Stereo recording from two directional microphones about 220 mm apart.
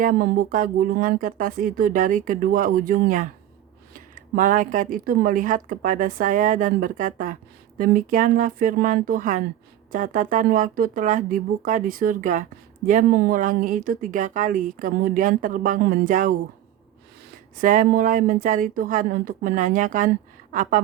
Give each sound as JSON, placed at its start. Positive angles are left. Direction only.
{"t": 0.0, "sound": "speech", "side_deg": -40}
{"t": 17.6, "sound": "speech", "side_deg": -40}